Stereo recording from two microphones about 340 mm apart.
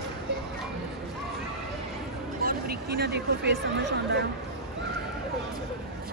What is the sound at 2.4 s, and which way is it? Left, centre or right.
Vehicle, right.